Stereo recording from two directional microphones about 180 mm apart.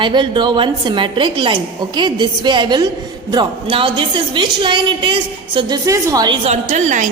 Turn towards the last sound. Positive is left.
turn(degrees=-45)  # may be behind; listen again after turning